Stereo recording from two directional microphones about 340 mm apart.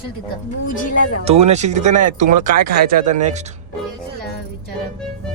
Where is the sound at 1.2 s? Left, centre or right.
Centre.